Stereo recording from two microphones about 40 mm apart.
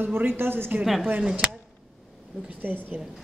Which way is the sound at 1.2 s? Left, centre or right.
Centre.